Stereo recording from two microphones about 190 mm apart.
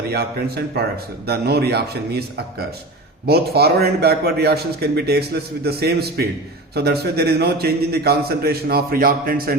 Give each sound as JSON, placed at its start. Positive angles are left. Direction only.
{"t": 0.1, "sound": "a man's voice", "side_deg": -55}
{"t": 3.2, "sound": "a man's voice", "side_deg": -55}